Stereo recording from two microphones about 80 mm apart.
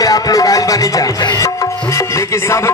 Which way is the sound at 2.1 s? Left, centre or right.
Left.